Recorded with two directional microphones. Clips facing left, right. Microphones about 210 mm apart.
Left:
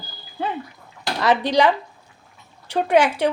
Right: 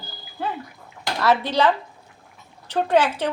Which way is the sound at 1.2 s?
15° left (ahead or behind).